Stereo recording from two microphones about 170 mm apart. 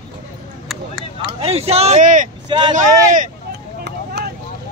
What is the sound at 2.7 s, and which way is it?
Speech, 50° right (ahead or behind).